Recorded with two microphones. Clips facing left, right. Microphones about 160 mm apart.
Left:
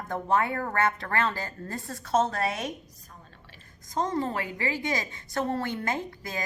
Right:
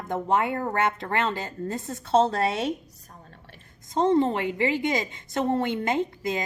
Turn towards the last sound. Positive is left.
turn(degrees=-20)  # may be behind; listen again after turning